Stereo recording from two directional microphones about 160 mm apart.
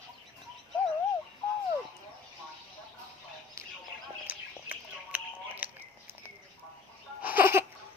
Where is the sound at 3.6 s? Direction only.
20° right (ahead or behind).